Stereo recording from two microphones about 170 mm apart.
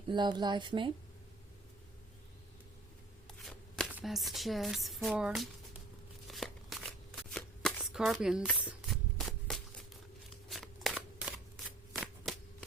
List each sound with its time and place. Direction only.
0.1 s speech: 25° right (ahead or behind)
3.2 s shuffling cards: 5° left (ahead or behind)
3.9 s speech: centre (ahead or behind)
6.2 s shuffling cards: centre (ahead or behind)